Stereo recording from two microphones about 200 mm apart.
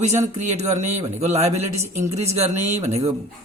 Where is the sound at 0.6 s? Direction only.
35° right (ahead or behind).